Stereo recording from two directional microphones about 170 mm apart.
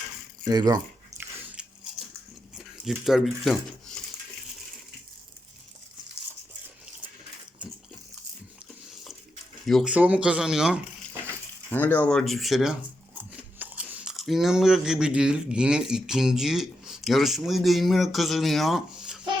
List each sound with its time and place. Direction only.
0.4 s speech: 25° right (ahead or behind)
1.6 s biting: 5° right (ahead or behind)
2.8 s speech: centre (ahead or behind)
7.6 s bathtub: 5° right (ahead or behind)
9.6 s speech: centre (ahead or behind)
11.7 s speech: 10° left (ahead or behind)